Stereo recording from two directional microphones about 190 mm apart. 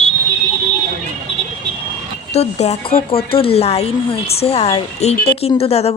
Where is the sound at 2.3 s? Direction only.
35° left (ahead or behind).